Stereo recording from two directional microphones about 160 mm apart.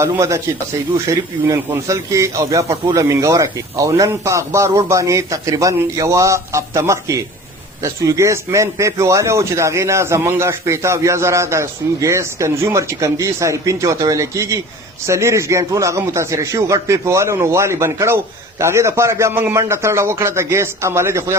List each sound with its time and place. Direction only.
0.0 s a man's voice: 20° right (ahead or behind)